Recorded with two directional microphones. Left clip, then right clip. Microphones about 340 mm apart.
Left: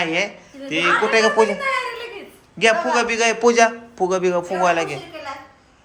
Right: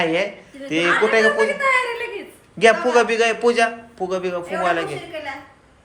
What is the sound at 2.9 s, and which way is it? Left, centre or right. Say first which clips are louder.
Speech: right 2 dB; centre.